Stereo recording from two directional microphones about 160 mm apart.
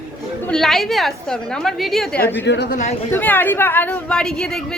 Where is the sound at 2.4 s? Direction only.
90° left.